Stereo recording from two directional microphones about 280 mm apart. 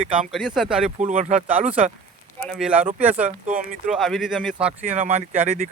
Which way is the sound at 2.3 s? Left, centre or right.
Centre.